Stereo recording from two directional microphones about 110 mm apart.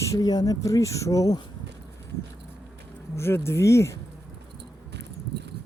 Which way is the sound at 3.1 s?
25° left (ahead or behind).